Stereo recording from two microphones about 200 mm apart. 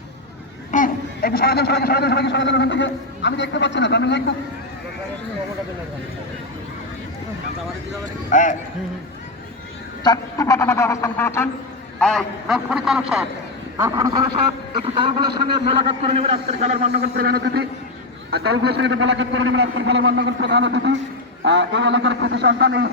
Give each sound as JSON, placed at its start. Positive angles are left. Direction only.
{"t": 0.7, "sound": "a man's voice", "side_deg": 45}
{"t": 8.3, "sound": "a man's voice", "side_deg": 40}
{"t": 10.0, "sound": "a woman's voice", "side_deg": 20}
{"t": 13.7, "sound": "a man's voice", "side_deg": -15}
{"t": 17.0, "sound": "a man's voice", "side_deg": -50}